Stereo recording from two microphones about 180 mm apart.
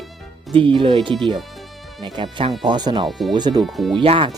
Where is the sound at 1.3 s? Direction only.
Centre (ahead or behind).